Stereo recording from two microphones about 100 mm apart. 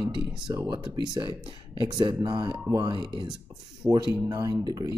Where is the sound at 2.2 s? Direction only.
50° right (ahead or behind).